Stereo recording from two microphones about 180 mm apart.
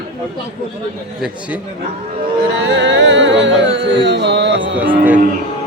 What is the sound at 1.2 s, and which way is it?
Speech, 5° right (ahead or behind).